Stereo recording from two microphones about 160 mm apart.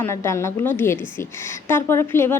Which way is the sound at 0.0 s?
15° left (ahead or behind).